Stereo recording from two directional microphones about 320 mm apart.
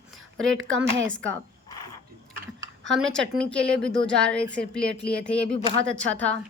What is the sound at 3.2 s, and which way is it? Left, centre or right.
Speech, right.